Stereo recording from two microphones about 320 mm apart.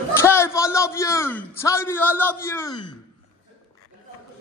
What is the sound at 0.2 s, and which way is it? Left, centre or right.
A man's voice, centre.